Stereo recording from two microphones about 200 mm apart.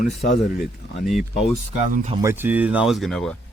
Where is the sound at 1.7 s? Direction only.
40° right (ahead or behind).